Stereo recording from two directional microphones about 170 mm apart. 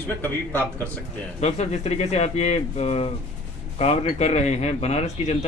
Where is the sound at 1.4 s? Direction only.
40° left (ahead or behind).